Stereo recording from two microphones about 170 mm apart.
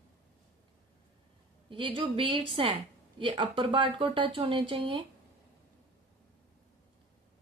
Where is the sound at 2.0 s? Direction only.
30° right (ahead or behind).